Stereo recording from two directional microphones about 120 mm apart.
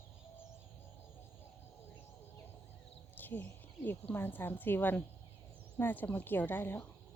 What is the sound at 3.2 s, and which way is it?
Speech, 15° left (ahead or behind).